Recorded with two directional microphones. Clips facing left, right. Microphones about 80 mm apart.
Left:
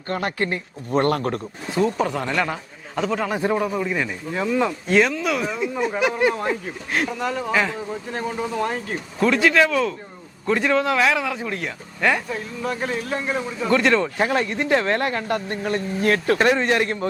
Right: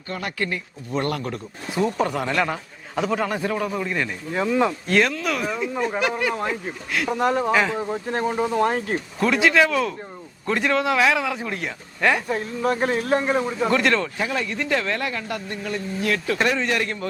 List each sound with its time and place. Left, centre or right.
0.1 s speech: left
1.7 s speech: centre
4.4 s speech: centre
4.9 s speech: centre
7.1 s speech: right
7.5 s speech: centre
7.8 s speech: right
9.1 s speech: centre
12.3 s speech: right
13.3 s speech: right
13.7 s speech: centre
14.2 s speech: left